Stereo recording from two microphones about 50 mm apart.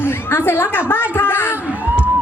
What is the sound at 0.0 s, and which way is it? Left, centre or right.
A woman's voice, left.